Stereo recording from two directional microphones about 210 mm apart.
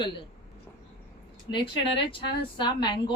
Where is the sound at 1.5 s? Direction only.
25° left (ahead or behind).